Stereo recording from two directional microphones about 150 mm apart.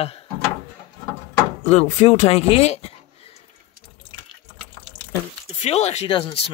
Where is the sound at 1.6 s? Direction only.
45° left (ahead or behind).